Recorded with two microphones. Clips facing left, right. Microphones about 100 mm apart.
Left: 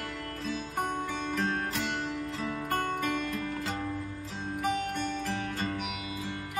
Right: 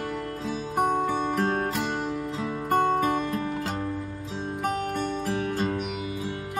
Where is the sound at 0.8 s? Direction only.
40° right (ahead or behind).